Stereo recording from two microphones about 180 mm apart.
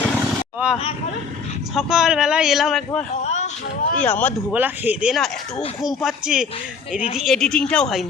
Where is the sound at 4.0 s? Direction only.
10° left (ahead or behind).